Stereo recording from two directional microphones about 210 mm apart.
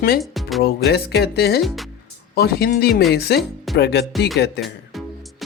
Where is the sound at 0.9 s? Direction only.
50° left (ahead or behind).